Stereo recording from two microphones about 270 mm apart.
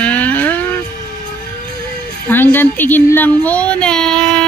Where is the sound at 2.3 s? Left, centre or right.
Centre.